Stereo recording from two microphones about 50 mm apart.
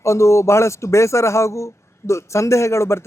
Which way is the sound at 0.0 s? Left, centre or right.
Left.